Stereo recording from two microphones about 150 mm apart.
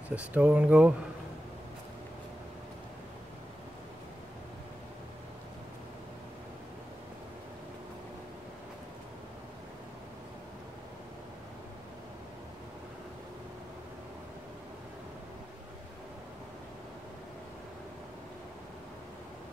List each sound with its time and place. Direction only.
0.1 s speech: 10° right (ahead or behind)